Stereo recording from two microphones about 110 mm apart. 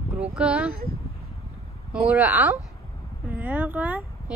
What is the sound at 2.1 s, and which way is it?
Speech, 20° right (ahead or behind).